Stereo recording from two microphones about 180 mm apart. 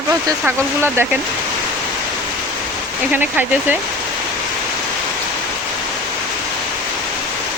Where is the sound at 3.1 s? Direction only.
10° right (ahead or behind).